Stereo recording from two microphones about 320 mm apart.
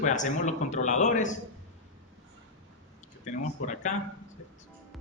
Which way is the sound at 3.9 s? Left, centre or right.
Left.